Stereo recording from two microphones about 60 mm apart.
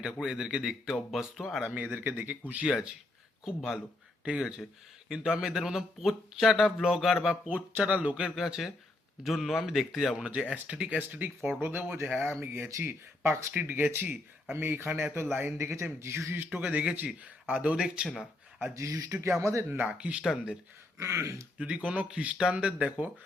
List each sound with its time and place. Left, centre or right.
0.0 s a man's voice: centre
1.7 s a man's voice: right; by 7.3 s centre
7.4 s speech: right
8.4 s a man's voice: centre
10.3 s speech: right
15.7 s speech: right
16.5 s speech: right
18.7 s speech: right
19.8 s a man's voice: right
21.0 s speech: right
21.6 s speech: centre